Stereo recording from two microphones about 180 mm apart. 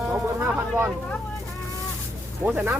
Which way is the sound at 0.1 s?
15° right (ahead or behind).